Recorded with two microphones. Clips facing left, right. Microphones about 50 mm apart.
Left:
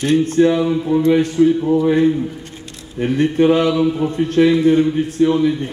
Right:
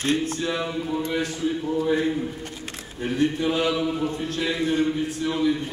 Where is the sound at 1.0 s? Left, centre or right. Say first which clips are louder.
Left 15 dB; left.